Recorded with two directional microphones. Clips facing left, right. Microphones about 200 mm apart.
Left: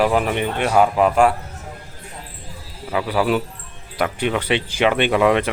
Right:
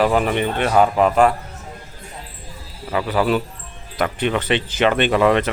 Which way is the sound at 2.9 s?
5° left (ahead or behind).